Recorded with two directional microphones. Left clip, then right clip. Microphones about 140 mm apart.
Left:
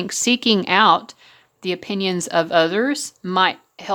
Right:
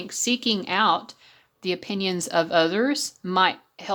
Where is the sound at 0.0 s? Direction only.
35° left (ahead or behind).